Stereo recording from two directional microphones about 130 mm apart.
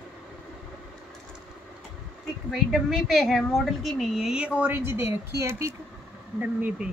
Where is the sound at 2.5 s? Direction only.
Centre (ahead or behind).